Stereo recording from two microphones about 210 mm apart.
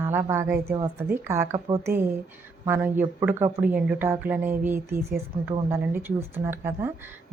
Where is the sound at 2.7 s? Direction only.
10° right (ahead or behind).